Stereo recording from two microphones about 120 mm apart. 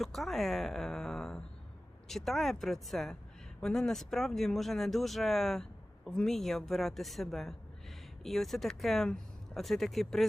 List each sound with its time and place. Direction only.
0.0 s a woman's voice: centre (ahead or behind)